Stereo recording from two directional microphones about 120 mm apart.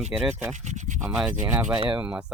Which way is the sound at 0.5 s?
90° right.